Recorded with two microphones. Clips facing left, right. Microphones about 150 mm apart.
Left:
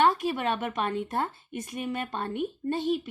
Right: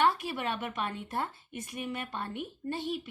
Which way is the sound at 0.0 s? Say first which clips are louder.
Left 4 dB; 45° left (ahead or behind).